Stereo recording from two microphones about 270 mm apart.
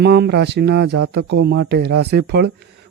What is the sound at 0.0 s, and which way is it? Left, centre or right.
Speech, right.